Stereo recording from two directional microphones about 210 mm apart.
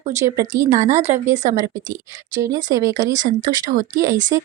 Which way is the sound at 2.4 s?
15° right (ahead or behind).